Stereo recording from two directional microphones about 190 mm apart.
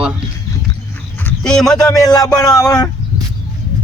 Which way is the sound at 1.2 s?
5° left (ahead or behind).